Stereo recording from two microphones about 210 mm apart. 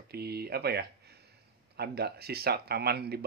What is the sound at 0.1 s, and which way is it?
Speech, 50° right (ahead or behind).